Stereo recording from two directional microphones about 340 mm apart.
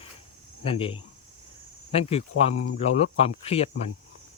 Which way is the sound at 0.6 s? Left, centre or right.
Centre.